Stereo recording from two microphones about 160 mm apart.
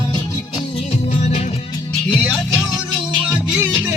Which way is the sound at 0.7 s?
40° left (ahead or behind).